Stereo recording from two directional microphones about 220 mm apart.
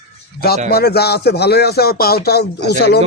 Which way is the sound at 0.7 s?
45° left (ahead or behind).